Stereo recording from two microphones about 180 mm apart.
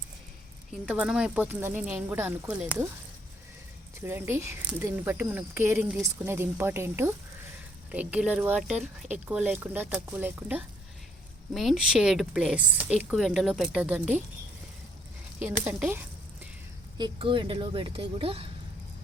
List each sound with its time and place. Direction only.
0.9 s speech: 5° right (ahead or behind)
4.0 s a woman's voice: 15° right (ahead or behind)
15.6 s speech: 10° right (ahead or behind)
17.0 s speech: 30° right (ahead or behind)